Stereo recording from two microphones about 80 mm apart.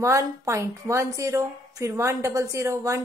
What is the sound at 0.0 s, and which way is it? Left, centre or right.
A woman's voice, right.